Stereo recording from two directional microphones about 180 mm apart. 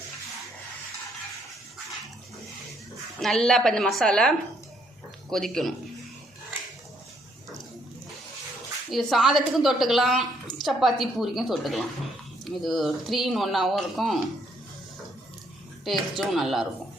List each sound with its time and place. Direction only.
3.2 s speech: centre (ahead or behind)
8.9 s speech: centre (ahead or behind)
15.8 s speech: centre (ahead or behind)